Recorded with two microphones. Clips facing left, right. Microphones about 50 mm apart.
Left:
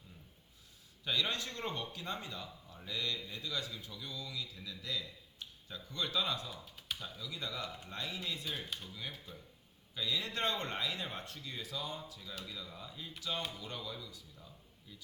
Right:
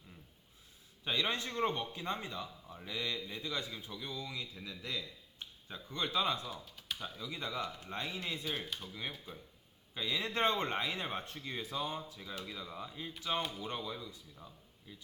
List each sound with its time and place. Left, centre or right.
1.0 s a man's voice: right
8.4 s speech: centre
8.9 s a man's voice: right